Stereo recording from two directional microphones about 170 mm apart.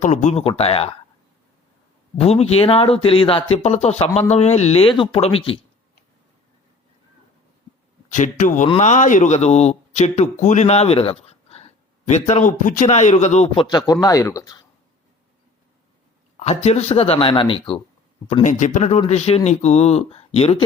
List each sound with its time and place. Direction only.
0.0 s speech: 45° left (ahead or behind)
2.1 s speech: 35° left (ahead or behind)
8.1 s a man's voice: 50° left (ahead or behind)
13.7 s speech: 25° left (ahead or behind)
16.4 s speech: 40° left (ahead or behind)
18.4 s speech: 45° left (ahead or behind)